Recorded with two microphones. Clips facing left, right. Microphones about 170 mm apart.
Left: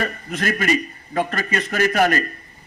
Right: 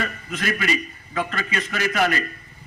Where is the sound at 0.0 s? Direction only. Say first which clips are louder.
Left 3 dB; 40° left (ahead or behind).